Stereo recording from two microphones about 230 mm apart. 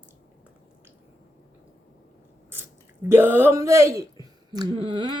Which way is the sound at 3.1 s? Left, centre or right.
Centre.